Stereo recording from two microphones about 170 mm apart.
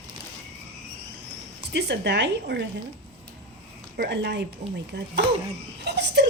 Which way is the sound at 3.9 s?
75° right (ahead or behind).